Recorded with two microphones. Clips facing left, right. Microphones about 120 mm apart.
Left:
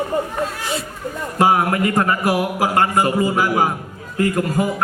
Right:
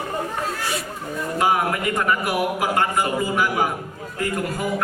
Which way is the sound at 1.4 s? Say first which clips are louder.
Left 5 dB; 40° left (ahead or behind).